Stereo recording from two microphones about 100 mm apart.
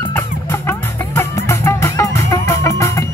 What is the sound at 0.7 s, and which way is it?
Music, 25° left (ahead or behind).